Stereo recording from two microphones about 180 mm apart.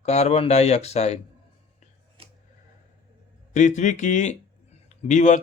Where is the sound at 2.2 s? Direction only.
30° right (ahead or behind).